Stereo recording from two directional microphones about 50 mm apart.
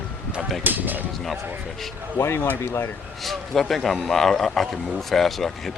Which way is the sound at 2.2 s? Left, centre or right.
Left.